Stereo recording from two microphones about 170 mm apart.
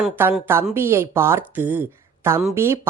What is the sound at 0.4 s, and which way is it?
Speech, 15° right (ahead or behind).